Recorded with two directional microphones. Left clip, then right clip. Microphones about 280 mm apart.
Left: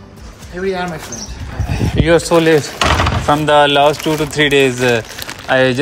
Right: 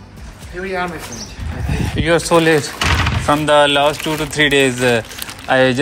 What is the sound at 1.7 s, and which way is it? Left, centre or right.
Speech, centre.